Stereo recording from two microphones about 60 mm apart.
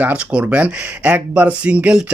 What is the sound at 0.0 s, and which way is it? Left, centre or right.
Speech, right.